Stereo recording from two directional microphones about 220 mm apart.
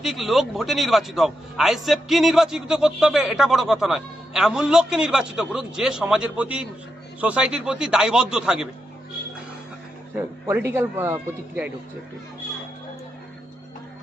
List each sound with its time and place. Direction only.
0.0 s a man's voice: centre (ahead or behind)
10.2 s a man's voice: 10° right (ahead or behind)